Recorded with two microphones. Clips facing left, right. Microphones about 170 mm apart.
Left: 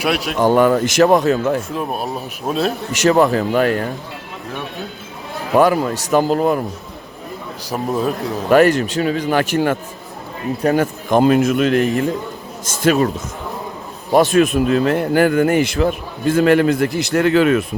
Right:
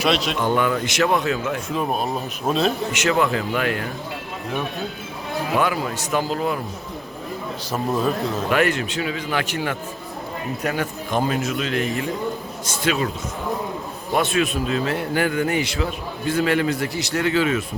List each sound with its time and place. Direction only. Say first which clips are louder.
0.0 s speech: left 1 dB; 10° left (ahead or behind)
0.3 s a man's voice: left 7 dB; 40° left (ahead or behind)
1.7 s speech: even; 5° left (ahead or behind)
2.9 s a man's voice: left 7 dB; 40° left (ahead or behind)
5.5 s a man's voice: left 10 dB; 40° left (ahead or behind)
8.4 s a man's voice: left 10 dB; 40° left (ahead or behind)
11.2 s a man's voice: left 10 dB; 55° left (ahead or behind)
14.1 s a man's voice: left 8 dB; 40° left (ahead or behind); by 17.7 s 55° left (ahead or behind)